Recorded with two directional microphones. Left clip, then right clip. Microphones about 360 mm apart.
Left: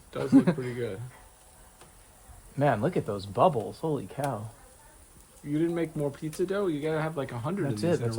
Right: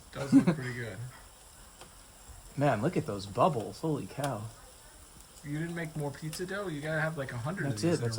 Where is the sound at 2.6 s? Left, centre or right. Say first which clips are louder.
Left 3 dB; centre.